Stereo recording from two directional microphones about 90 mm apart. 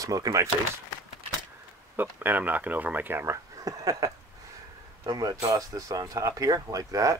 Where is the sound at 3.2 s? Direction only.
35° right (ahead or behind).